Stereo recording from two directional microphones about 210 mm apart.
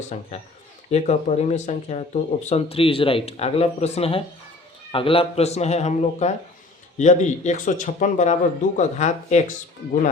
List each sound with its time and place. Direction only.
0.1 s a man's voice: 35° left (ahead or behind)